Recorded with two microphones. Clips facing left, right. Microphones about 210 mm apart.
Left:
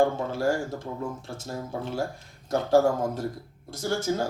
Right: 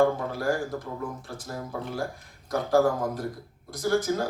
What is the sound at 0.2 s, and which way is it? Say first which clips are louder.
Speech: left 2 dB; 25° left (ahead or behind).